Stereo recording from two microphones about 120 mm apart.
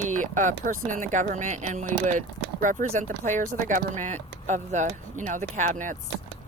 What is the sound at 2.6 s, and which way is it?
Speech, 90° right.